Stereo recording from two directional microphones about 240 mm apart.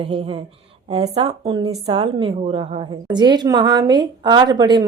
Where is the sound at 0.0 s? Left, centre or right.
Right.